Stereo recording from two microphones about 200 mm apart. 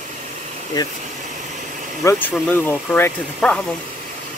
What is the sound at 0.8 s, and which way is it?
Speech, 20° left (ahead or behind).